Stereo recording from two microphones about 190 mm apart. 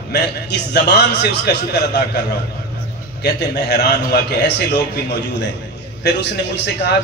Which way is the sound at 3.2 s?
60° left (ahead or behind).